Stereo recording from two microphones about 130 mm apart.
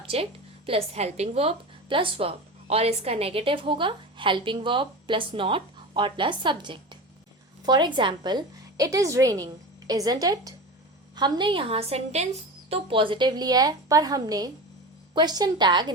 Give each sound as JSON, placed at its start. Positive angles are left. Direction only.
{"t": 0.0, "sound": "a woman's voice", "side_deg": -45}
{"t": 12.9, "sound": "a woman's voice", "side_deg": -40}